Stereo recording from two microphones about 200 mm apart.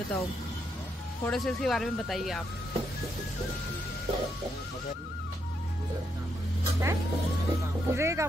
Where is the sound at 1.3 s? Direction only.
Centre (ahead or behind).